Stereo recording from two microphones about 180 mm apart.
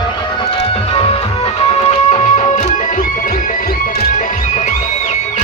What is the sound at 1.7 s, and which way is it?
Music, 35° left (ahead or behind).